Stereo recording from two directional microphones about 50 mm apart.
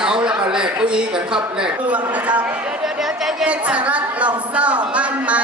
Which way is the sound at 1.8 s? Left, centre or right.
Right.